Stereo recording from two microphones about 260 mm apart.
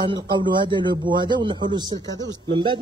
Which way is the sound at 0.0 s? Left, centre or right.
Centre.